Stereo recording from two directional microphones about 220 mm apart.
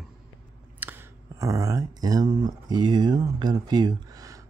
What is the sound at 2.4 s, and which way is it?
Speech, 20° right (ahead or behind).